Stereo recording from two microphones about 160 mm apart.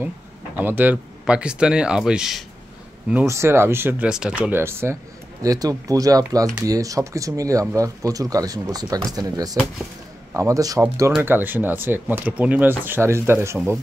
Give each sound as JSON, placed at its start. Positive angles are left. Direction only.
{"t": 0.6, "sound": "speech", "side_deg": -10}